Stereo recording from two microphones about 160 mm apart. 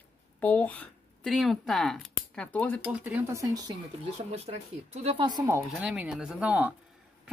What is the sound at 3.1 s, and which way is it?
Speech, 20° right (ahead or behind).